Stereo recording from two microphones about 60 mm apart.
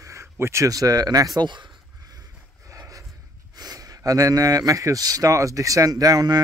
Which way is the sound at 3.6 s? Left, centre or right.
Right.